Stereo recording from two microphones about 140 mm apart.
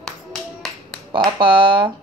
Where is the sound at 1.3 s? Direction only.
35° right (ahead or behind).